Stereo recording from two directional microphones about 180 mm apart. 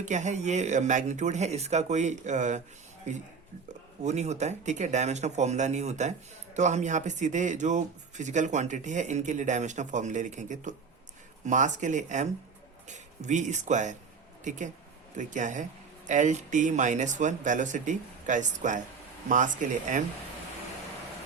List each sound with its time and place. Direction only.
0.0 s speech: 40° right (ahead or behind)